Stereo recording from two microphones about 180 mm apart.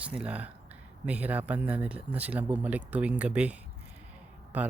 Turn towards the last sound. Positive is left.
turn(degrees=-10)  # may be behind; listen again after turning